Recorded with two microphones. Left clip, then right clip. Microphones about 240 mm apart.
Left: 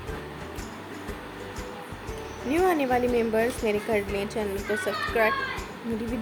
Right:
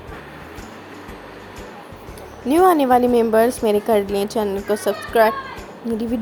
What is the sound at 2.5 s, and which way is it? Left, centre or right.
A woman's voice, right.